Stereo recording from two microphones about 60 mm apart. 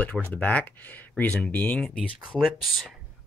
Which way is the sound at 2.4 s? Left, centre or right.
Centre.